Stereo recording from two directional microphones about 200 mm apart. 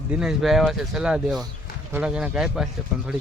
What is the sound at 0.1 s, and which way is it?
Speech, 5° right (ahead or behind).